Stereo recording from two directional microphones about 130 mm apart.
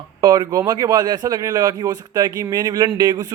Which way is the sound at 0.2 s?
35° right (ahead or behind).